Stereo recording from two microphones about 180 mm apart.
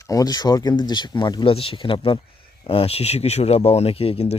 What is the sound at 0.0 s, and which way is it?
Speech, 20° left (ahead or behind).